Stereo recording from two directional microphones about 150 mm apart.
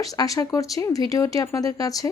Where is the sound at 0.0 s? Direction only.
25° left (ahead or behind).